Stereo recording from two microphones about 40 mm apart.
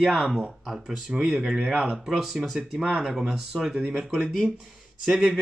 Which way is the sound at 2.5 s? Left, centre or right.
Centre.